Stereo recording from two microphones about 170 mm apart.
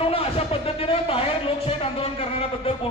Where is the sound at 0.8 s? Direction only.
35° left (ahead or behind).